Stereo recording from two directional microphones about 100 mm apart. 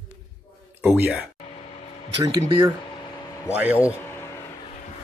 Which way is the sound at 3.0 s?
45° left (ahead or behind).